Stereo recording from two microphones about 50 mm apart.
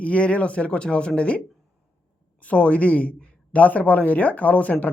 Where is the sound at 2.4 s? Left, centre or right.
Left.